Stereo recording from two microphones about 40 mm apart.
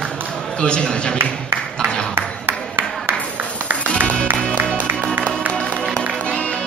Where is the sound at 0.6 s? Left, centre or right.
Left.